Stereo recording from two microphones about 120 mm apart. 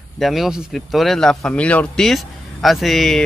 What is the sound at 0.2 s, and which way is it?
Speech, centre (ahead or behind).